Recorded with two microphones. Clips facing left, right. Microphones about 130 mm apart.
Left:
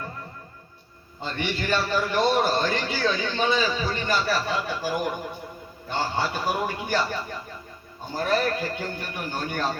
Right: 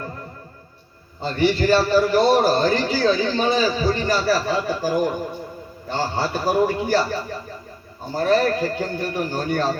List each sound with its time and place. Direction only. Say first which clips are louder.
1.2 s a man's voice: right 10 dB; 35° right (ahead or behind)